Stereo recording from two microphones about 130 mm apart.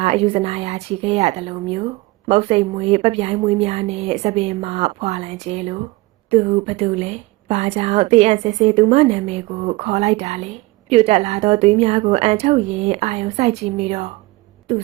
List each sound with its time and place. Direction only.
0.0 s a woman's voice: 50° right (ahead or behind)